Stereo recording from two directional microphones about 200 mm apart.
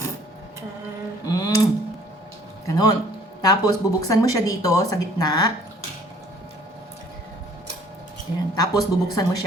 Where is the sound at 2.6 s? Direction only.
20° left (ahead or behind).